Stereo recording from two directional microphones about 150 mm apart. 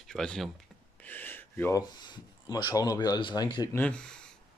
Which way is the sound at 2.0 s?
30° left (ahead or behind).